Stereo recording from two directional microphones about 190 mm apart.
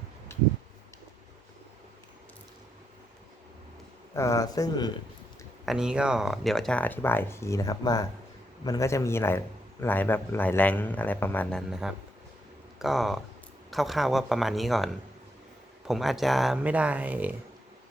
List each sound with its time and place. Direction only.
4.1 s speech: 15° left (ahead or behind)
5.6 s speech: 5° right (ahead or behind)
11.7 s speech: 5° right (ahead or behind)
15.9 s speech: centre (ahead or behind)